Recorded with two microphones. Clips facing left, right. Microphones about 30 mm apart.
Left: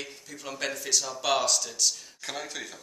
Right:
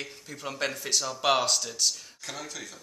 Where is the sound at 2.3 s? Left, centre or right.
Centre.